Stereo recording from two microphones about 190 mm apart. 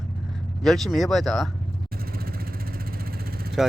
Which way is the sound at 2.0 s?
50° right (ahead or behind).